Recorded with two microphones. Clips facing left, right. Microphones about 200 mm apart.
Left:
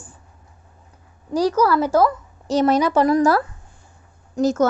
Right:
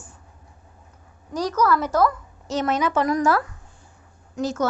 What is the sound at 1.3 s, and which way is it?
A woman's voice, 30° left (ahead or behind).